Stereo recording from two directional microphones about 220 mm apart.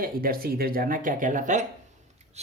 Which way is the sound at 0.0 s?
40° right (ahead or behind).